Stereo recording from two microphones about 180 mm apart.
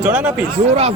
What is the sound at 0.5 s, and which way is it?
Speech, 35° right (ahead or behind).